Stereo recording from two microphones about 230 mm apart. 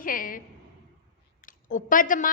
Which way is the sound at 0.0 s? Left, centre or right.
Left.